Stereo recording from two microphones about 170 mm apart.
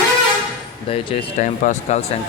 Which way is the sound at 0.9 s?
45° left (ahead or behind).